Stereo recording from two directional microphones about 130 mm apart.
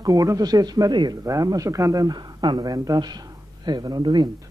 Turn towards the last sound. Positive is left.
turn(degrees=-30)  # may be behind; listen again after turning